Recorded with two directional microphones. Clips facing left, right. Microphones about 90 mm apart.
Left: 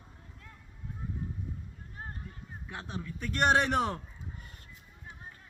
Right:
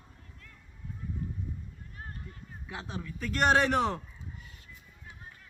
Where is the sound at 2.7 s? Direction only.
Centre (ahead or behind).